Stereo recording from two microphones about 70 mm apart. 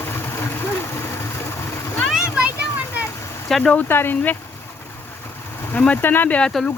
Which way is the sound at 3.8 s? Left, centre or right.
Left.